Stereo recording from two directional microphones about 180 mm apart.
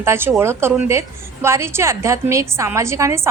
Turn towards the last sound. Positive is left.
turn(degrees=-15)  # may be behind; listen again after turning